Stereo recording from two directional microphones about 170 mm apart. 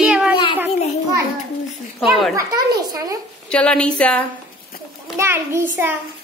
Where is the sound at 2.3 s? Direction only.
20° right (ahead or behind).